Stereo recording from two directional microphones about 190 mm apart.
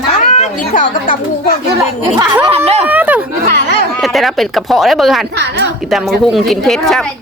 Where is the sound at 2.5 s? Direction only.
35° right (ahead or behind).